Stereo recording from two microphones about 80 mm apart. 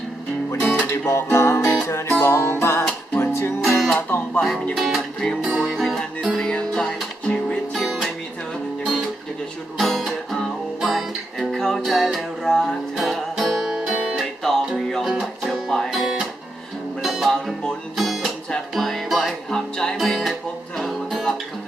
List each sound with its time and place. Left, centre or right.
0.7 s music: left
3.6 s music: centre
4.4 s speech: centre
4.7 s music: centre
5.4 s music: centre
5.6 s music: centre
9.7 s music: centre
14.2 s music: centre